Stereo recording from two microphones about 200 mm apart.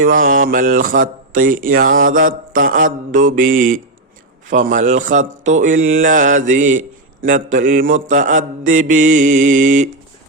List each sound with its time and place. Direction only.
0.0 s speech: 45° right (ahead or behind)